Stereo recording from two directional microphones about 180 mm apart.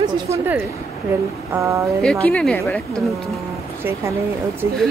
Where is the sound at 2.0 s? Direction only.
5° left (ahead or behind).